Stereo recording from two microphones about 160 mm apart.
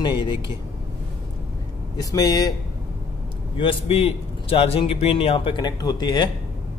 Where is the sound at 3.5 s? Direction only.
35° left (ahead or behind).